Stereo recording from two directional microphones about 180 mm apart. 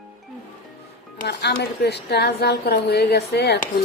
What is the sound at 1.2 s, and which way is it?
A woman's voice, 70° left (ahead or behind).